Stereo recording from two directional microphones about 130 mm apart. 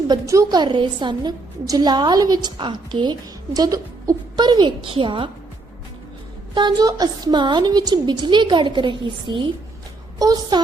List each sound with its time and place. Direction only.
0.1 s a woman's voice: 30° right (ahead or behind)
6.5 s a woman's voice: 35° right (ahead or behind)